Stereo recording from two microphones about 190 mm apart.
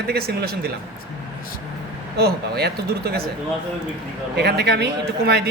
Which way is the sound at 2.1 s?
55° right (ahead or behind).